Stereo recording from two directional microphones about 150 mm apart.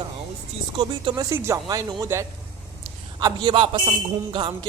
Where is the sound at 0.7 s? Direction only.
30° right (ahead or behind).